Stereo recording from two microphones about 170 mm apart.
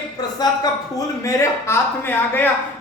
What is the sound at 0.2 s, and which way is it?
A man's voice, 20° left (ahead or behind).